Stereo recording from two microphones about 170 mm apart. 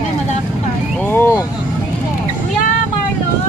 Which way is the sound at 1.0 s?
15° left (ahead or behind).